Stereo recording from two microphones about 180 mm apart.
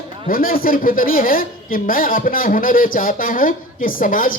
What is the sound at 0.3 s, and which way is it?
A woman's voice, 50° left (ahead or behind).